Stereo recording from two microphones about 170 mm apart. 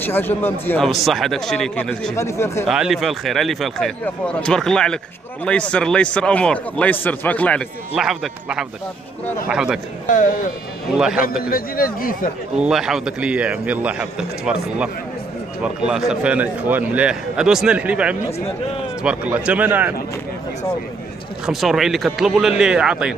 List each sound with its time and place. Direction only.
0.0 s a man's voice: 10° left (ahead or behind)
0.8 s speech: centre (ahead or behind)
2.7 s speech: centre (ahead or behind)
7.9 s speech: centre (ahead or behind)
10.0 s speech: 50° left (ahead or behind)
10.9 s speech: 5° right (ahead or behind)
11.5 s speech: 55° left (ahead or behind)
12.5 s a man's voice: 5° right (ahead or behind)
21.5 s speech: centre (ahead or behind)